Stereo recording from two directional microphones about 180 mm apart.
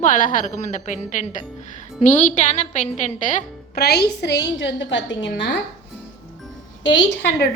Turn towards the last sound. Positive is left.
turn(degrees=75)  # may be behind; listen again after turning